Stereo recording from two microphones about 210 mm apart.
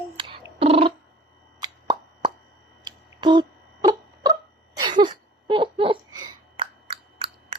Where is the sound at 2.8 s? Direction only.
20° right (ahead or behind).